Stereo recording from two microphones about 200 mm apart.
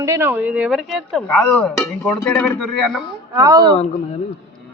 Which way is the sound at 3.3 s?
15° right (ahead or behind).